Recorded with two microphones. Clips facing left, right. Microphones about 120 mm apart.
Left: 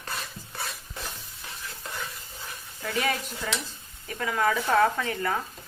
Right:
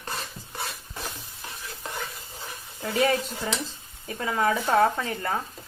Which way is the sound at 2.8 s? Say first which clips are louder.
Right 5 dB; 25° right (ahead or behind).